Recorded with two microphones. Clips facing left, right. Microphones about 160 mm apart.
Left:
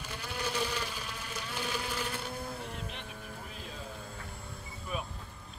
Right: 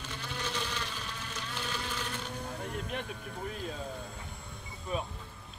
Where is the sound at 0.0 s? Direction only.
10° left (ahead or behind).